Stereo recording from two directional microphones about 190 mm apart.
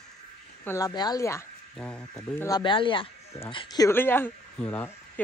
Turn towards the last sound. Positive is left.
turn(degrees=10)  # may be behind; listen again after turning